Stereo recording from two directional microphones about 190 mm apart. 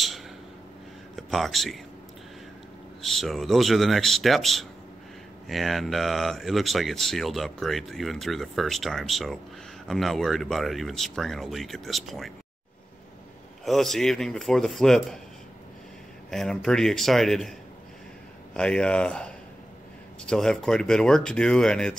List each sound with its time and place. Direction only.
1.1 s speech: centre (ahead or behind)
3.0 s speech: centre (ahead or behind)
13.7 s speech: centre (ahead or behind)
16.3 s speech: 5° left (ahead or behind)